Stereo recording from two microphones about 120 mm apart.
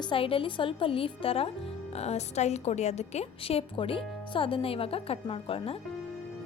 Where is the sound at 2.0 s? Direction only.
65° left (ahead or behind).